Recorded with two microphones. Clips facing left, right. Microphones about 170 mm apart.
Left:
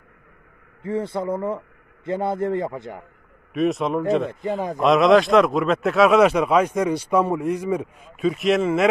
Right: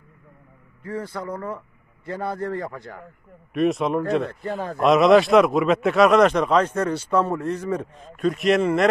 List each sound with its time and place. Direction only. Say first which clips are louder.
0.8 s a man's voice: left 5 dB; 25° left (ahead or behind)
3.5 s speech: even; centre (ahead or behind)
4.3 s a man's voice: left 3 dB; 15° left (ahead or behind)
4.7 s speech: right 1 dB; centre (ahead or behind)